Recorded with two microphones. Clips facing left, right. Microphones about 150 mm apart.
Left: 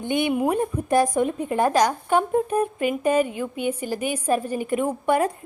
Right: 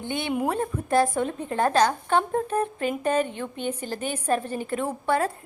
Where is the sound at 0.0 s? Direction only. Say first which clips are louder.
Left 5 dB; 15° left (ahead or behind).